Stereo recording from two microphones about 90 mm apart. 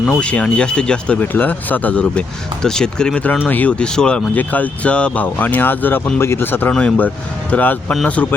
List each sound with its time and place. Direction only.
0.1 s speech: 10° left (ahead or behind)